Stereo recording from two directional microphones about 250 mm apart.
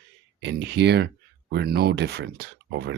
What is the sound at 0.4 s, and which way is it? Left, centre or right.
Speech, right.